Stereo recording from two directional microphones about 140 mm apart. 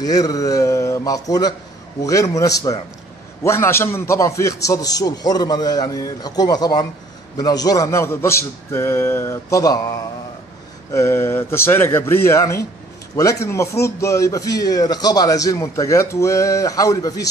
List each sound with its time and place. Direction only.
0.0 s a man's voice: 25° left (ahead or behind)